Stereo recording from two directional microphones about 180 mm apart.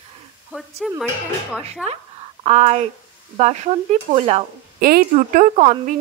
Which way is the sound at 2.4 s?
35° right (ahead or behind).